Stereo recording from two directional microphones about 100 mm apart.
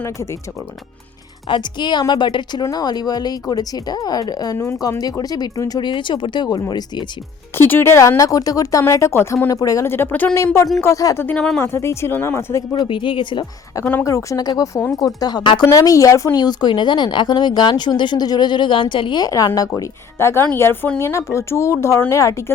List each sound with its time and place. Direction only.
1.5 s speech: 50° left (ahead or behind)
7.5 s speech: 25° left (ahead or behind)
9.8 s speech: 25° left (ahead or behind)
10.3 s speech: 30° left (ahead or behind)
11.2 s speech: 20° left (ahead or behind)
12.9 s speech: 55° left (ahead or behind)
14.0 s speech: 30° left (ahead or behind)
15.7 s speech: 35° left (ahead or behind)
16.4 s speech: 45° left (ahead or behind)
19.2 s speech: 35° left (ahead or behind)
20.1 s speech: 25° left (ahead or behind)